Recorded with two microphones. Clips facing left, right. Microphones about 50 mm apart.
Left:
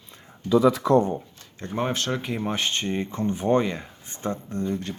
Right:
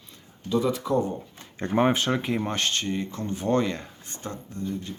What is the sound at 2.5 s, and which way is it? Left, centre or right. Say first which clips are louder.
Speech: even; centre.